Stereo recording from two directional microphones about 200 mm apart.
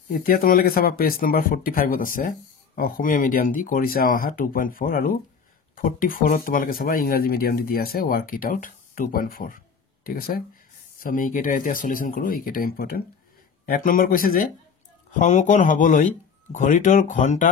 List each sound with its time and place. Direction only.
0.1 s speech: 45° left (ahead or behind)